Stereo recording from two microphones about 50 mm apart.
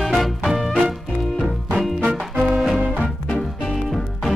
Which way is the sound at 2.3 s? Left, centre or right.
Centre.